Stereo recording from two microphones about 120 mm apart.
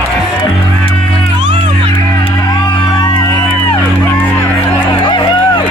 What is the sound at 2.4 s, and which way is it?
Music, 35° left (ahead or behind).